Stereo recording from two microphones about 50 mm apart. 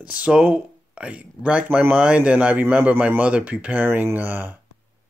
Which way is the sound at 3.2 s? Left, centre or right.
Right.